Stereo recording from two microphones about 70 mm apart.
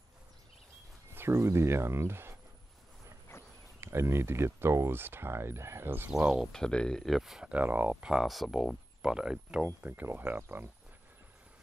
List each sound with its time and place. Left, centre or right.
1.1 s speech: right
3.8 s speech: right
6.2 s speech: centre
6.5 s speech: centre
7.1 s speech: centre
7.5 s speech: right
7.9 s speech: centre
8.2 s speech: centre
9.8 s speech: right